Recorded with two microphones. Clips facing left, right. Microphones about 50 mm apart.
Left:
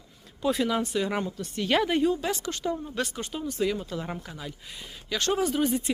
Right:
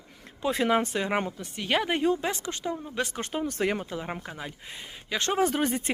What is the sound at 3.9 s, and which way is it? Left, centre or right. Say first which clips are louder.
Speech: even; right.